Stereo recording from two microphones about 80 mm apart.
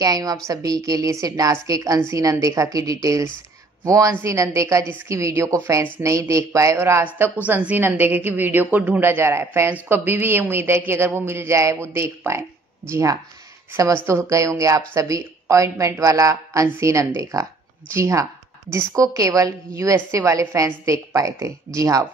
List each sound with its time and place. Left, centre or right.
0.0 s a woman's voice: right
7.4 s a woman's voice: right